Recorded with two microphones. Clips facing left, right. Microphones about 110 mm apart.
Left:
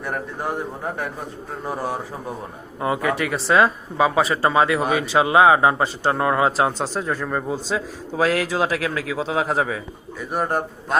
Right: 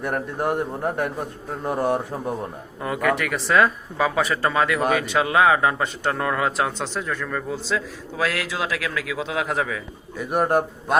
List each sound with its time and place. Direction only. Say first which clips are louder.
0.1 s a man's voice: right 1 dB; centre (ahead or behind)
1.6 s a man's voice: right 4 dB; 5° left (ahead or behind)
2.8 s a man's voice: left 1 dB; 20° left (ahead or behind)
7.5 s a man's voice: left 1 dB; 40° left (ahead or behind)
10.2 s a man's voice: right 3 dB; 10° right (ahead or behind)